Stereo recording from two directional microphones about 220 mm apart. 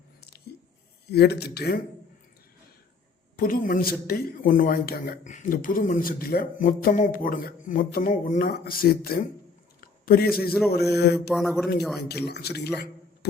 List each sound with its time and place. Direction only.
0.2 s squish: 45° left (ahead or behind)
1.1 s a man's voice: 45° left (ahead or behind)
3.3 s a man's voice: 40° left (ahead or behind)
11.3 s a man's voice: centre (ahead or behind)
11.9 s a man's voice: 45° left (ahead or behind)